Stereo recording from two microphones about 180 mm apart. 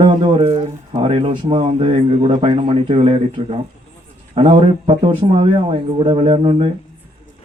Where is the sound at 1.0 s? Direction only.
35° right (ahead or behind).